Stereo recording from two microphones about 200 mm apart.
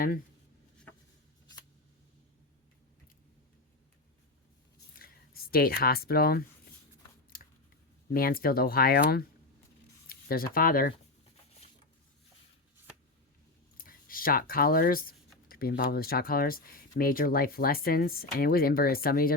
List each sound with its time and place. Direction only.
4.9 s a sound: 50° left (ahead or behind)
7.3 s scissors: 45° left (ahead or behind)
8.1 s speech: 45° left (ahead or behind)
13.7 s speech: 45° left (ahead or behind)